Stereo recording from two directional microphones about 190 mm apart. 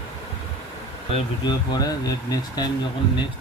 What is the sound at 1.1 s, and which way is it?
Speech, 20° left (ahead or behind).